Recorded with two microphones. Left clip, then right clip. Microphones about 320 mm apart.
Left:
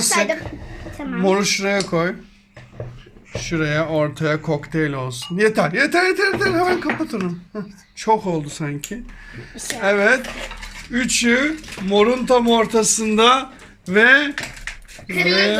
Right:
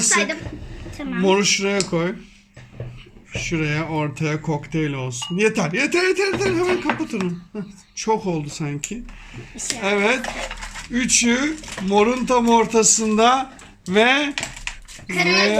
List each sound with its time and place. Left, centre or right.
0.9 s speech: centre
3.4 s speech: centre